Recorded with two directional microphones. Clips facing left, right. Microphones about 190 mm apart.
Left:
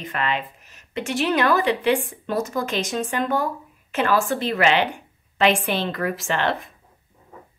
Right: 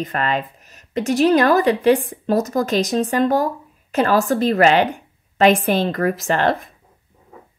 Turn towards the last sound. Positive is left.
turn(degrees=-40)  # may be behind; listen again after turning